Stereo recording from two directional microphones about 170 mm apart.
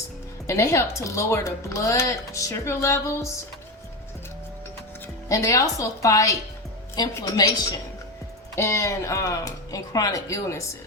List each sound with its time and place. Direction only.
0.4 s speech: 15° left (ahead or behind)
5.3 s a woman's voice: 20° left (ahead or behind)